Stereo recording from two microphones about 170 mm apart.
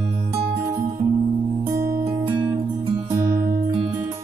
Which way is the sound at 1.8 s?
20° right (ahead or behind).